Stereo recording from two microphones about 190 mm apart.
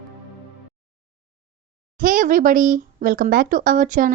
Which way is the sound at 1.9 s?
45° right (ahead or behind).